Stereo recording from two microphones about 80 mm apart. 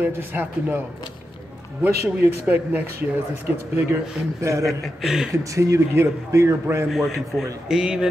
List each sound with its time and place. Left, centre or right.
0.0 s speech: right
1.8 s speech: centre
4.4 s a man's voice: right
4.6 s speech: centre
5.3 s a man's voice: right
6.9 s speech: centre